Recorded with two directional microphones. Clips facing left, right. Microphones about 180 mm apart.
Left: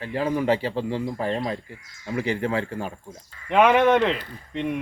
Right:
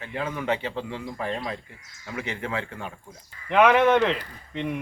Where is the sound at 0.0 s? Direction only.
35° left (ahead or behind).